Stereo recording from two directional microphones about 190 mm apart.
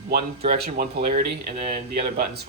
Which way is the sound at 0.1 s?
55° right (ahead or behind).